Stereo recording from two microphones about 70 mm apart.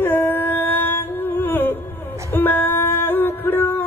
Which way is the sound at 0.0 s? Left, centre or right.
Left.